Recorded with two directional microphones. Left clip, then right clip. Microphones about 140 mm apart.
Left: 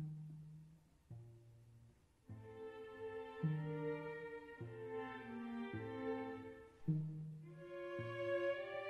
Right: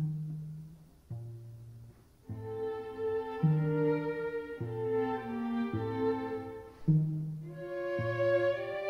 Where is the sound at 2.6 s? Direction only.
25° right (ahead or behind).